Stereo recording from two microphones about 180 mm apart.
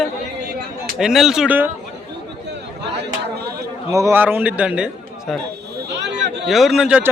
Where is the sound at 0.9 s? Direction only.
Centre (ahead or behind).